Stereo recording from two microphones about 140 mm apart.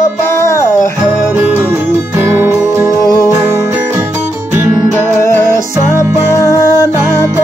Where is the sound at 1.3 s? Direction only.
15° right (ahead or behind).